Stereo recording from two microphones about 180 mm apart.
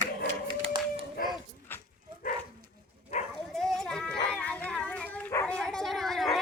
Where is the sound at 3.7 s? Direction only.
Centre (ahead or behind).